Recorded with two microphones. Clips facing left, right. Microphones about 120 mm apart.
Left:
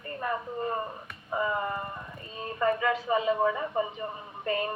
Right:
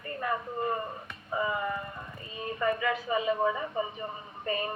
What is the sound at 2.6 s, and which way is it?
Speech, 40° left (ahead or behind).